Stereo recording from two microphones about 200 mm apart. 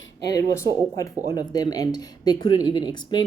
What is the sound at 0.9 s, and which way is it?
Speech, 20° left (ahead or behind).